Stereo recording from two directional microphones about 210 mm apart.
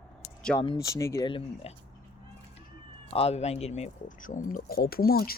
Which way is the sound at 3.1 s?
30° left (ahead or behind).